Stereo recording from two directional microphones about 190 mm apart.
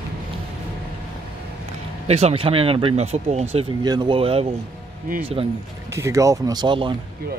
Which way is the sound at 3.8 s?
25° right (ahead or behind).